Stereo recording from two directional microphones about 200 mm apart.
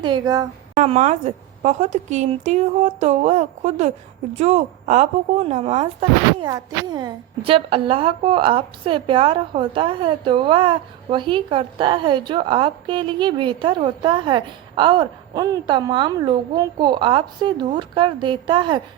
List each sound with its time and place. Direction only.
0.0 s speech: 20° right (ahead or behind)
0.8 s a woman's voice: 35° right (ahead or behind)